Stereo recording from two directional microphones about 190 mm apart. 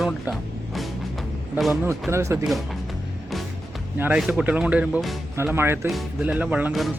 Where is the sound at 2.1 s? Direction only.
15° right (ahead or behind).